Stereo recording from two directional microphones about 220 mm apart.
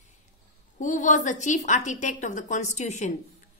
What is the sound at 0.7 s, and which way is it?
A woman's voice, 35° left (ahead or behind).